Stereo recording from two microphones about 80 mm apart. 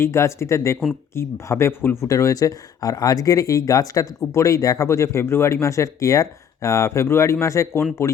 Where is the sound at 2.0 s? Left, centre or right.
Left.